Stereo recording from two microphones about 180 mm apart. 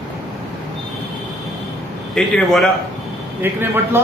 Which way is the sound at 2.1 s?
5° left (ahead or behind).